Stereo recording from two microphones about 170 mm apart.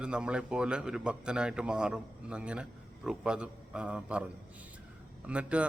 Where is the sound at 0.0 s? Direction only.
5° right (ahead or behind).